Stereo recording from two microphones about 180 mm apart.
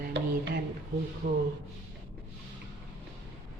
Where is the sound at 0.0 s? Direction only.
60° right (ahead or behind).